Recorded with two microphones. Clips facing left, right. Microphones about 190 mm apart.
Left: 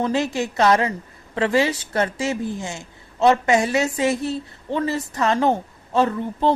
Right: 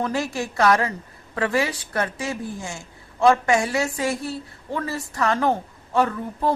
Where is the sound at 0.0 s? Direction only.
20° left (ahead or behind).